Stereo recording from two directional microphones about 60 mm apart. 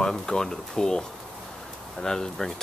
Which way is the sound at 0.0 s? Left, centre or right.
Centre.